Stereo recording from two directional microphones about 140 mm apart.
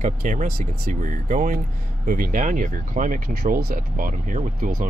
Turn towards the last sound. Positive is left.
turn(degrees=-70)  # may be behind; listen again after turning